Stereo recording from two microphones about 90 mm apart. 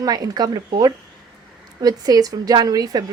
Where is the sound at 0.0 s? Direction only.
45° right (ahead or behind).